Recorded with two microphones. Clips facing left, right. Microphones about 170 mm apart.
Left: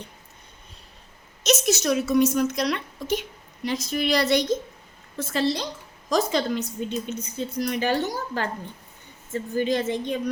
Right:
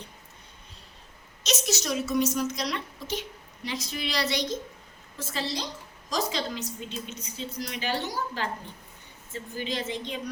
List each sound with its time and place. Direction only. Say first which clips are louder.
1.5 s a woman's voice: left 7 dB; 50° left (ahead or behind)